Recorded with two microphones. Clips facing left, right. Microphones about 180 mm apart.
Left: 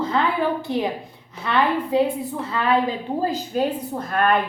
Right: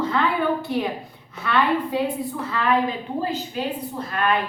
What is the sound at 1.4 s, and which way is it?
Speech, 25° left (ahead or behind).